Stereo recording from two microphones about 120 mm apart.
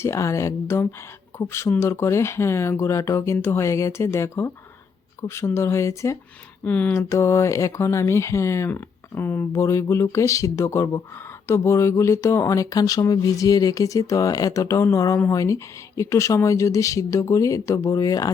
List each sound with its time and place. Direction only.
0.0 s speech: 25° left (ahead or behind)
6.7 s speech: 15° left (ahead or behind)